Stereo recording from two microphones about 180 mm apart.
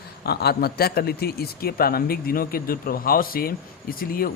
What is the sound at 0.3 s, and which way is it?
Speech, 60° left (ahead or behind).